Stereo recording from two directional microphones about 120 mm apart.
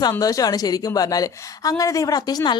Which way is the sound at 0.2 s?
30° left (ahead or behind).